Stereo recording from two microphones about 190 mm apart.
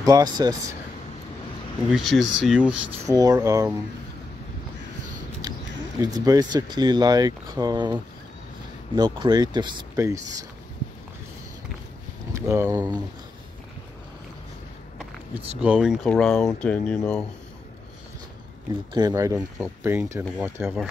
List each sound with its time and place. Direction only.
0.0 s speech: 20° right (ahead or behind)
1.9 s speech: centre (ahead or behind)
3.1 s speech: 20° right (ahead or behind)
5.9 s speech: 20° right (ahead or behind)
12.4 s speech: 15° right (ahead or behind)
15.3 s speech: 5° right (ahead or behind)
18.9 s speech: 15° right (ahead or behind)